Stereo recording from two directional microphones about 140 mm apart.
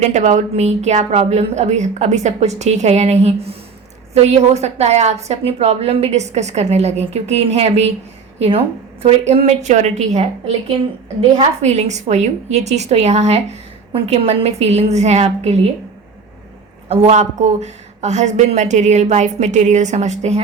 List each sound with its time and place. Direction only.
0.0 s a woman's voice: 60° right (ahead or behind)
16.9 s speech: 50° right (ahead or behind)